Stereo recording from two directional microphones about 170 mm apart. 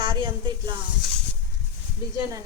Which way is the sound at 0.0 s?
30° right (ahead or behind).